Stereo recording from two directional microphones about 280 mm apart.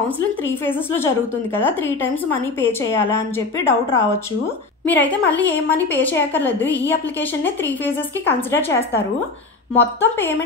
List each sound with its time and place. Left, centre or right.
0.5 s a woman's voice: centre
2.2 s a woman's voice: centre